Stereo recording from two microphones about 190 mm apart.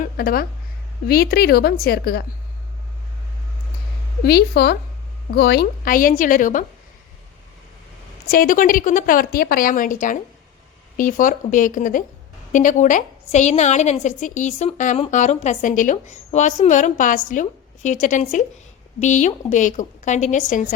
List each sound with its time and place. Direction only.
0.0 s a woman's voice: 50° left (ahead or behind)
4.2 s a woman's voice: 55° left (ahead or behind)
8.3 s a woman's voice: 45° left (ahead or behind)